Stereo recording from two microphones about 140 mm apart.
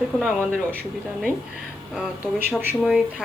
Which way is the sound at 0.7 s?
15° right (ahead or behind).